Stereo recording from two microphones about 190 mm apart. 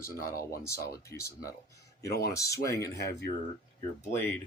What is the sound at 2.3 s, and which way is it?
Speech, 15° left (ahead or behind).